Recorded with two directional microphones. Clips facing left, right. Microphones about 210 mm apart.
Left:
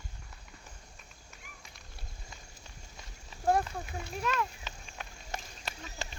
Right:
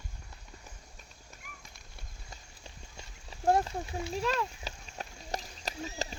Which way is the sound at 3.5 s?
30° right (ahead or behind).